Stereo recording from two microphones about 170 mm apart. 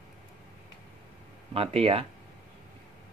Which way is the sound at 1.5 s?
35° right (ahead or behind).